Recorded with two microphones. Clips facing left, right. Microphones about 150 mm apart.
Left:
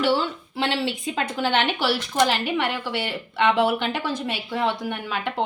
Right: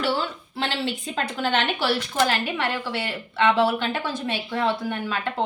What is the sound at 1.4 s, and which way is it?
Speech, 15° left (ahead or behind).